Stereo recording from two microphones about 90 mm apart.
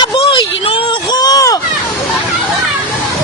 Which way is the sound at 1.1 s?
45° left (ahead or behind).